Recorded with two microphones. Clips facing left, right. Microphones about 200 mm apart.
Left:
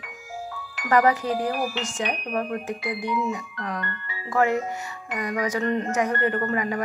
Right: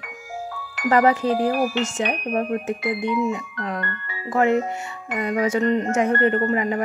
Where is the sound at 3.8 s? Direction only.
55° right (ahead or behind).